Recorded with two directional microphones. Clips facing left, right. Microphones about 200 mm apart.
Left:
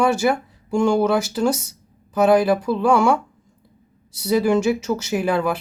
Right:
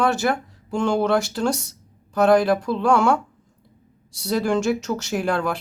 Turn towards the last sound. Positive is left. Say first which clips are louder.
# left 3 dB
turn(degrees=5)  # may be behind; listen again after turning